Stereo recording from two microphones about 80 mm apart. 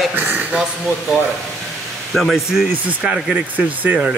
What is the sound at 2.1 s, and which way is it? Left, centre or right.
Speech, centre.